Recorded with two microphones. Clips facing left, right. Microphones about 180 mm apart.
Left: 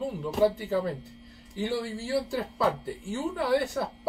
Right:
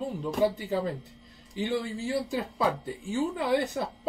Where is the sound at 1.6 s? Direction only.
20° right (ahead or behind).